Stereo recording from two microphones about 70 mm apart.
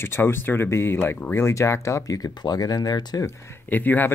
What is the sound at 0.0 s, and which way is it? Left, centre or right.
Speech, left.